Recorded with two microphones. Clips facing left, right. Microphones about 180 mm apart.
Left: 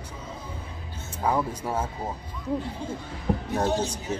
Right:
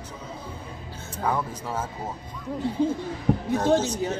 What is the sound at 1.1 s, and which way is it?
Speech, 10° left (ahead or behind).